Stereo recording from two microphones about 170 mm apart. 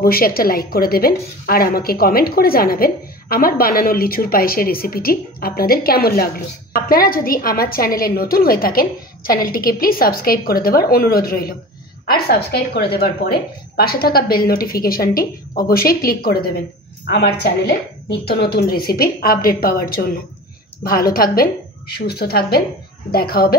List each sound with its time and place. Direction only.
0.0 s a woman's voice: 60° left (ahead or behind)